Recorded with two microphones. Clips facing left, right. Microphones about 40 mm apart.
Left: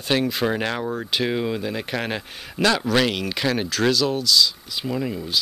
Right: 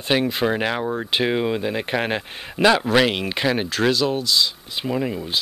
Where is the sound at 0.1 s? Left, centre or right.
Centre.